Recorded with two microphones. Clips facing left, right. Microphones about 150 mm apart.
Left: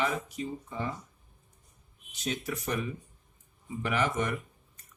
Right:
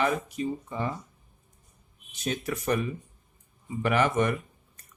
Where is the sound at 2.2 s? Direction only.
60° right (ahead or behind).